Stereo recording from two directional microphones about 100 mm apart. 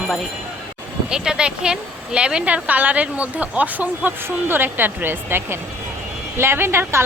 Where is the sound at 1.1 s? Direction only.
5° right (ahead or behind).